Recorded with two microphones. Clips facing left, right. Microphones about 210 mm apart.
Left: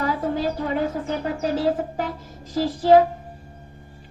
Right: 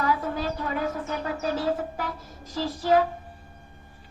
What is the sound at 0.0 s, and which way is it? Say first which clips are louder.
Music: left 3 dB; 25° left (ahead or behind).